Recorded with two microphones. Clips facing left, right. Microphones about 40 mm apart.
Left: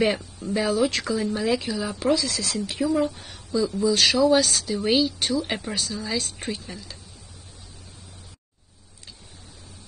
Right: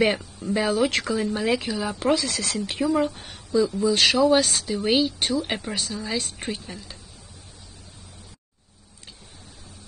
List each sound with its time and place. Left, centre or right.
0.0 s speech: right
5.5 s speech: centre
5.9 s speech: right